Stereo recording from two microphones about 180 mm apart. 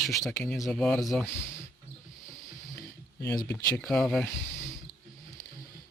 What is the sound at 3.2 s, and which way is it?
Speech, 15° left (ahead or behind).